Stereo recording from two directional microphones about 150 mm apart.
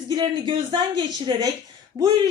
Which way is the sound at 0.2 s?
30° right (ahead or behind).